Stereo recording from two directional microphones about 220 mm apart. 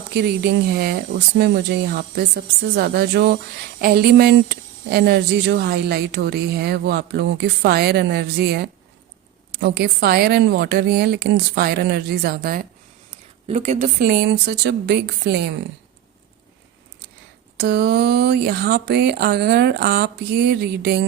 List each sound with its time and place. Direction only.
0.1 s speech: 45° right (ahead or behind)
13.5 s speech: 30° right (ahead or behind); by 15.5 s 50° right (ahead or behind)
17.6 s speech: 50° right (ahead or behind)